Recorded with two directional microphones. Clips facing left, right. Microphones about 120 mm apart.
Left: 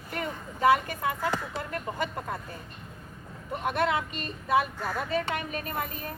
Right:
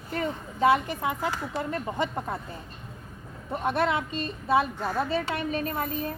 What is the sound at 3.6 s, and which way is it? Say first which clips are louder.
Speech: right 1 dB; 35° right (ahead or behind).